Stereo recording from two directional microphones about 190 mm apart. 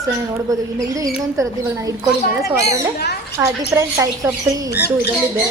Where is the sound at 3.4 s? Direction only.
15° right (ahead or behind).